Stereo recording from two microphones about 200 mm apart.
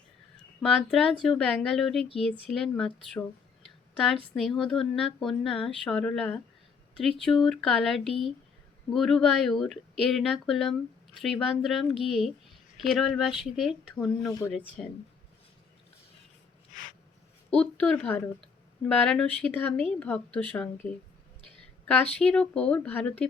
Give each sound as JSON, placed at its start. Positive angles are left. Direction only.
{"t": 0.6, "sound": "a woman's voice", "side_deg": 0}
{"t": 14.3, "sound": "a woman's voice", "side_deg": 15}
{"t": 14.5, "sound": "a woman's voice", "side_deg": 5}
{"t": 17.5, "sound": "a woman's voice", "side_deg": 5}
{"t": 21.5, "sound": "a sound", "side_deg": 5}
{"t": 22.1, "sound": "a woman's voice", "side_deg": 5}